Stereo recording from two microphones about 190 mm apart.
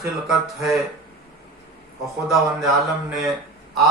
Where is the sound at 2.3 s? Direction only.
Centre (ahead or behind).